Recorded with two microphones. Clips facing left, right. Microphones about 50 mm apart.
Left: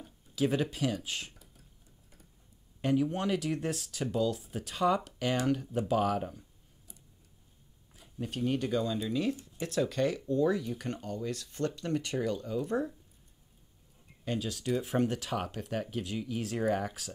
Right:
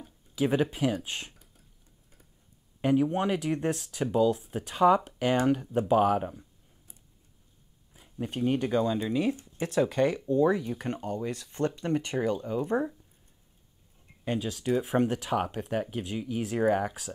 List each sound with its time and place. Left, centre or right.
0.0 s speech: centre
2.8 s speech: centre
5.7 s speech: right
7.9 s speech: right
14.2 s speech: centre